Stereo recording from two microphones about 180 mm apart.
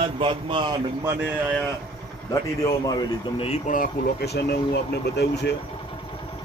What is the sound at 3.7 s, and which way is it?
Speech, 60° left (ahead or behind).